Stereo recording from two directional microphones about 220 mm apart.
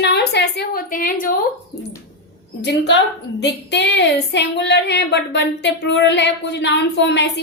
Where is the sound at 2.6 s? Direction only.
50° left (ahead or behind).